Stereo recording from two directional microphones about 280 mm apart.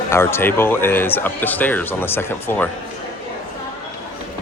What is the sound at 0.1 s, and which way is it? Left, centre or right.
Speech, centre.